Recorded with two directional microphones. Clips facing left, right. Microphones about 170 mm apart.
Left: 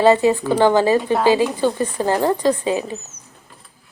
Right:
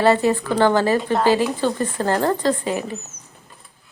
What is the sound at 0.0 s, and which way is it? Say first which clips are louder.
Speech: left 3 dB; 15° left (ahead or behind).